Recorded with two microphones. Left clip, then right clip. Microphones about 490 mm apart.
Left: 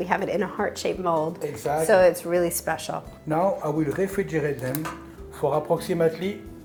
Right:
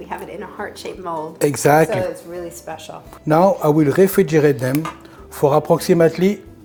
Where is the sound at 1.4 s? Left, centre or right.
Right.